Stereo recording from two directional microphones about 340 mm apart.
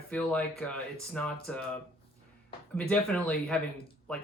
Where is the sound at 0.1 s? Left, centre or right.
Centre.